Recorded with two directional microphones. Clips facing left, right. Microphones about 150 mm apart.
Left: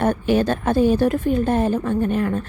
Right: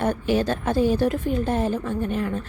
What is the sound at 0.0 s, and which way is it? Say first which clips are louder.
A woman's voice: left 4 dB; 60° left (ahead or behind).